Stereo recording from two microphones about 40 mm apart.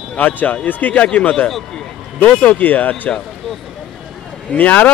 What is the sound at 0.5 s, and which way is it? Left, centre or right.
Speech, left.